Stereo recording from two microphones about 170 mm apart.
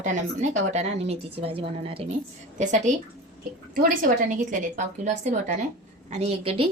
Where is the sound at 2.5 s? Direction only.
45° right (ahead or behind).